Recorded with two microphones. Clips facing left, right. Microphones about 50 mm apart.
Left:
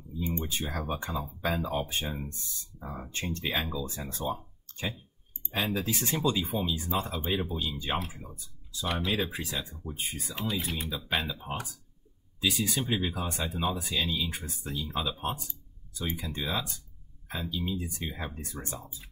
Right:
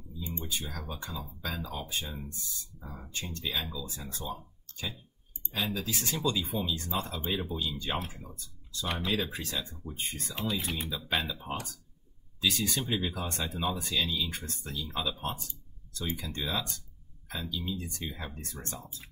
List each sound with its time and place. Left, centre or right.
0.5 s speech: left
6.4 s speech: centre
8.9 s speech: centre